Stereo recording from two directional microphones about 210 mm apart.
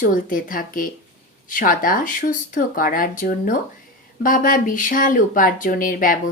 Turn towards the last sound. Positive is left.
turn(degrees=40)  # may be behind; listen again after turning